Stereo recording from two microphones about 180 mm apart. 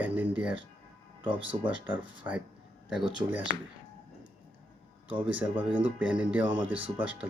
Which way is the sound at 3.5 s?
10° left (ahead or behind).